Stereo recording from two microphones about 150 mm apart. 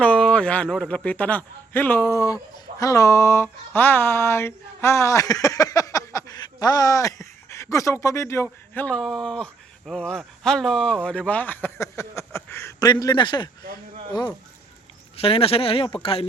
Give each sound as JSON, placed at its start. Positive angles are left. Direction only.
{"t": 0.0, "sound": "a man's voice", "side_deg": 10}
{"t": 12.9, "sound": "speech", "side_deg": 30}
{"t": 15.1, "sound": "speech", "side_deg": 40}